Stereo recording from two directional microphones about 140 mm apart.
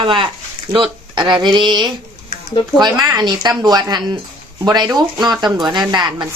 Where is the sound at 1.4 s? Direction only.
30° right (ahead or behind).